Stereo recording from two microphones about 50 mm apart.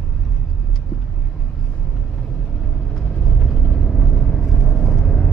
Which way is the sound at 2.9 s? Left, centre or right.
Centre.